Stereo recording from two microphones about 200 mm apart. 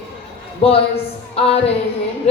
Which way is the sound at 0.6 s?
30° left (ahead or behind).